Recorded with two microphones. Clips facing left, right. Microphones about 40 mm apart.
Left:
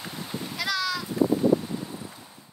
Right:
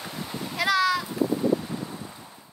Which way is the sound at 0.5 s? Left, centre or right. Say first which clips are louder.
Right 6 dB; centre.